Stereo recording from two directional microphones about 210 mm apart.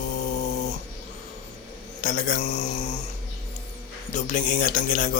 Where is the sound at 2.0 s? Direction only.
40° left (ahead or behind).